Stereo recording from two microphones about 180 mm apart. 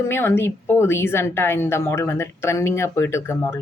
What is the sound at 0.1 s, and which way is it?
A woman's voice, 10° left (ahead or behind).